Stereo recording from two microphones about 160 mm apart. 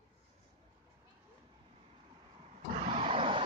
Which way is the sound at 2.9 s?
35° right (ahead or behind).